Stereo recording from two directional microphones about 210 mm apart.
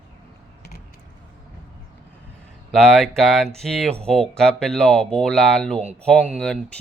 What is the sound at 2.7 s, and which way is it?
Speech, centre (ahead or behind).